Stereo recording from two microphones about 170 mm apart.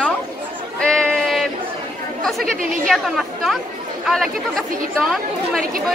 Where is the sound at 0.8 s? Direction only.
5° left (ahead or behind).